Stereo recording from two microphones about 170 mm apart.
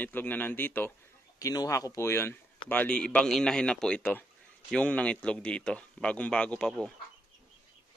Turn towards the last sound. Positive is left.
turn(degrees=5)  # may be behind; listen again after turning